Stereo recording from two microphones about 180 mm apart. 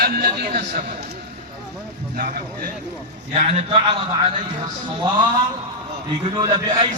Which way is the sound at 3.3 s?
35° right (ahead or behind).